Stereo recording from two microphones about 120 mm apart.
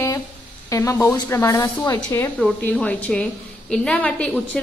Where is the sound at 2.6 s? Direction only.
10° left (ahead or behind).